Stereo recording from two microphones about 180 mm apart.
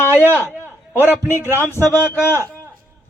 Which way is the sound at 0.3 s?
10° left (ahead or behind).